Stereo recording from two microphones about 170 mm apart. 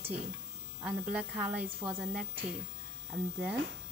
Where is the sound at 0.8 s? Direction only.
10° right (ahead or behind).